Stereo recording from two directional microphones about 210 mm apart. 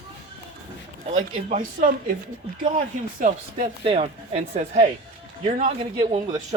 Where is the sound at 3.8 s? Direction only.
30° right (ahead or behind).